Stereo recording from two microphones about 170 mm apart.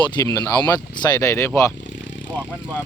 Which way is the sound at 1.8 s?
90° left.